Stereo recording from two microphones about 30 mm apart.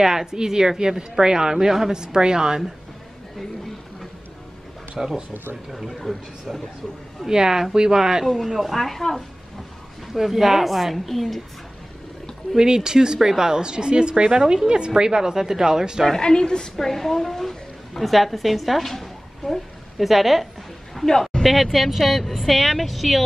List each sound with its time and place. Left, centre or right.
0.0 s speech: centre
5.0 s speech: centre
6.1 s a man's voice: centre
7.2 s speech: right
8.5 s a woman's voice: centre
10.1 s a woman's voice: centre
12.5 s speech: right
16.2 s a woman's voice: left
16.7 s a woman's voice: centre
20.0 s a woman's voice: centre